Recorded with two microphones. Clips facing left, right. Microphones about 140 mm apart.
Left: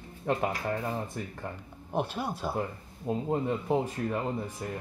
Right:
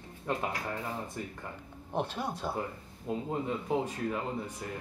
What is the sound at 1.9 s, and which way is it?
Speech, 10° left (ahead or behind).